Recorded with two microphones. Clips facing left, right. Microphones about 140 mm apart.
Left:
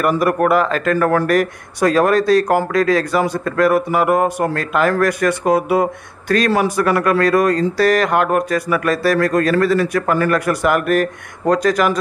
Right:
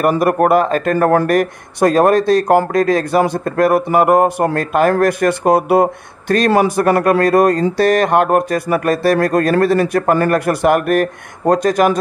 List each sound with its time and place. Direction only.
0.2 s a man's voice: 45° right (ahead or behind)